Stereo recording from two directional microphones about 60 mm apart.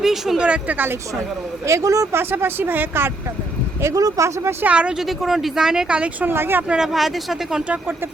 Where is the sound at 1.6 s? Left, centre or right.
Right.